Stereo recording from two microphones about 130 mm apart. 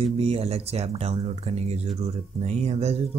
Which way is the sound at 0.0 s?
55° right (ahead or behind).